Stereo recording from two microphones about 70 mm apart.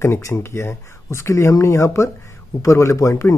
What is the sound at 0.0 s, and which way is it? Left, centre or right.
Speech, left.